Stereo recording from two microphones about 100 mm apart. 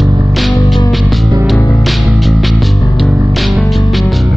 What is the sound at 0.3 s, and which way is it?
Music, centre (ahead or behind).